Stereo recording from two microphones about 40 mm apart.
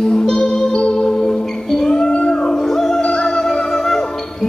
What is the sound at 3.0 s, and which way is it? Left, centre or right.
Music, left.